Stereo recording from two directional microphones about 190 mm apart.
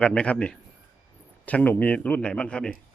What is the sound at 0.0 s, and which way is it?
Speech, 5° left (ahead or behind).